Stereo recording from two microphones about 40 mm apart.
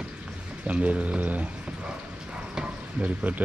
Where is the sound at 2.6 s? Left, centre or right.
Right.